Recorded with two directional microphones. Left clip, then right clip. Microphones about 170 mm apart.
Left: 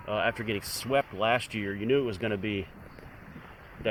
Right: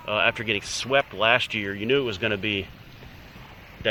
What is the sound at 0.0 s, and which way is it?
Speech, 15° left (ahead or behind).